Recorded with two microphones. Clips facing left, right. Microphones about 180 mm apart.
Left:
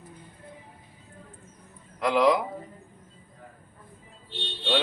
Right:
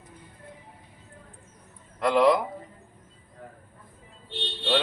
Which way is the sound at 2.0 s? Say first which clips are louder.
Right 1 dB; centre (ahead or behind).